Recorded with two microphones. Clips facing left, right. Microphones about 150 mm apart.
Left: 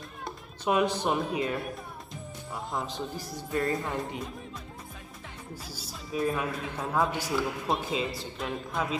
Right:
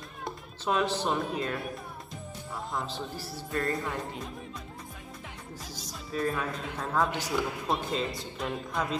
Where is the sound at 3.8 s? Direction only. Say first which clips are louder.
Left 2 dB; 20° left (ahead or behind).